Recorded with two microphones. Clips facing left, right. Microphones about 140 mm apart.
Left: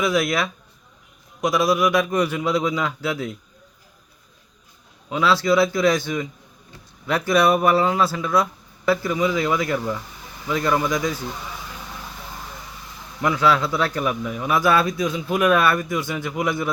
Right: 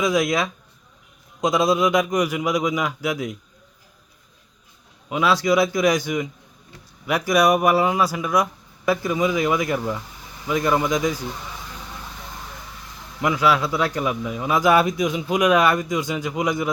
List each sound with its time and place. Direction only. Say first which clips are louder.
0.0 s speech: right 1 dB; 15° right (ahead or behind)
5.0 s a man's voice: even; 15° right (ahead or behind)
13.2 s speech: even; 10° right (ahead or behind)